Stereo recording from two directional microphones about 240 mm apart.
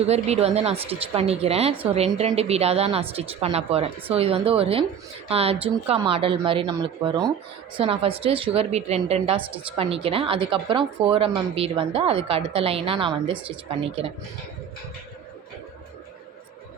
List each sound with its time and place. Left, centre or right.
0.1 s a woman's voice: right